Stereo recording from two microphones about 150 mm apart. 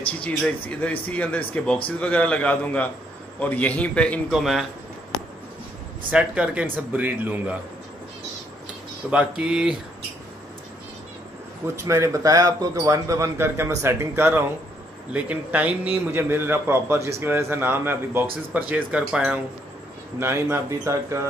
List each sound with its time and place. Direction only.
0.4 s speech: 10° left (ahead or behind)
6.0 s a man's voice: 10° right (ahead or behind)
9.1 s speech: 5° right (ahead or behind)
11.6 s a man's voice: 20° right (ahead or behind)